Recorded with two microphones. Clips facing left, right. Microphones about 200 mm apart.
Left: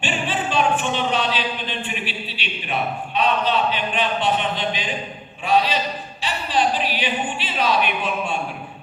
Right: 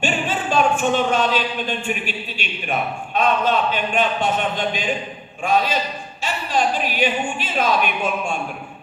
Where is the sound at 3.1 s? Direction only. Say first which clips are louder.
Right 2 dB; 45° right (ahead or behind).